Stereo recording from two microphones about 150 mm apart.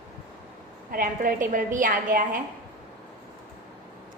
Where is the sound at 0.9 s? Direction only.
65° right (ahead or behind).